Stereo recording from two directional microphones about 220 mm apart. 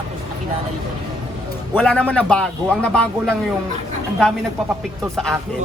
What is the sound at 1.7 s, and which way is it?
A man's voice, 5° left (ahead or behind).